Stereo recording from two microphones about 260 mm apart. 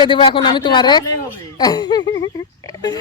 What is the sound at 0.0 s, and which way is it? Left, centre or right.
Speech, centre.